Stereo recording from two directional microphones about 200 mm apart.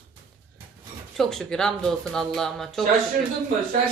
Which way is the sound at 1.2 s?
Centre (ahead or behind).